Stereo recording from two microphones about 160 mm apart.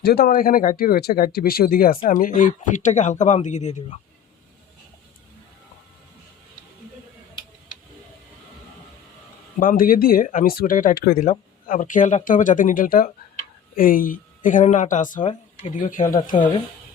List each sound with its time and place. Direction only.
0.0 s speech: 75° left (ahead or behind)
2.0 s speech: 55° left (ahead or behind)
9.6 s speech: 60° left (ahead or behind)
11.2 s speech: 50° left (ahead or behind)